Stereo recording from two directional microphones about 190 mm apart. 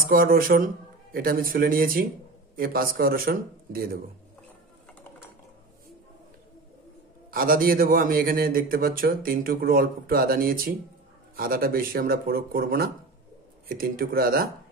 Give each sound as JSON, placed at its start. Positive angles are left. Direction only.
{"t": 0.0, "sound": "a man's voice", "side_deg": -50}
{"t": 7.2, "sound": "a man's voice", "side_deg": -50}